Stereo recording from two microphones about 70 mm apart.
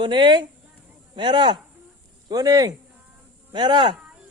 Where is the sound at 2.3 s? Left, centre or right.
Right.